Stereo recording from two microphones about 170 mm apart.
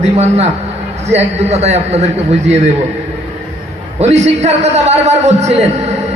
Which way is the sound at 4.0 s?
40° right (ahead or behind).